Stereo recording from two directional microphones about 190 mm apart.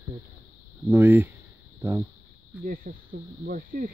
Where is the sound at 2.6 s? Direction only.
50° right (ahead or behind).